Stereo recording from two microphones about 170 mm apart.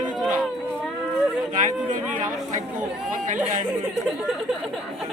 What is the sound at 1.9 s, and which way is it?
Speech, 45° right (ahead or behind).